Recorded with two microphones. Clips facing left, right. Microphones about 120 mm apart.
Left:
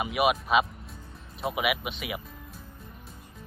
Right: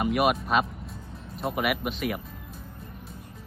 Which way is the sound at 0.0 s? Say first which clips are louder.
Right 2 dB; centre (ahead or behind).